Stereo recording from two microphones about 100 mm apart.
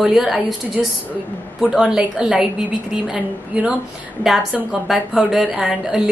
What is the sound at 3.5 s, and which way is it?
A woman's voice, 10° right (ahead or behind).